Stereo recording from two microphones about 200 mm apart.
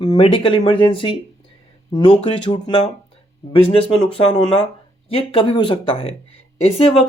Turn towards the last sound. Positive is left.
turn(degrees=30)  # may be behind; listen again after turning